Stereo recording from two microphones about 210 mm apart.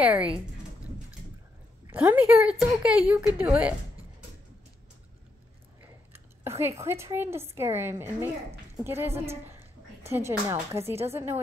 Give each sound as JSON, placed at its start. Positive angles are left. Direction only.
{"t": 0.0, "sound": "a woman's voice", "side_deg": -5}
{"t": 1.9, "sound": "a woman's voice", "side_deg": -10}
{"t": 6.1, "sound": "a woman's voice", "side_deg": -10}